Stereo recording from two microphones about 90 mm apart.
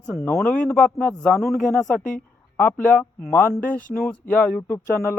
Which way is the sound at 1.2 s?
Centre (ahead or behind).